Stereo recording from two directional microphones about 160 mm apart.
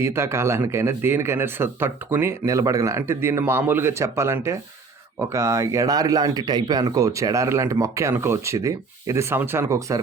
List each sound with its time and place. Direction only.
0.0 s speech: 15° right (ahead or behind)